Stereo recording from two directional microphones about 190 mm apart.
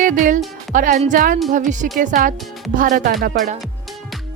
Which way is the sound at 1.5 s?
40° right (ahead or behind).